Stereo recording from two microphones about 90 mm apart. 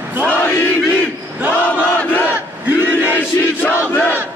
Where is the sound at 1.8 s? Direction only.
20° left (ahead or behind).